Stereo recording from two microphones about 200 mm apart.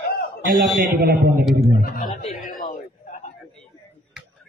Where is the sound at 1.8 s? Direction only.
45° left (ahead or behind).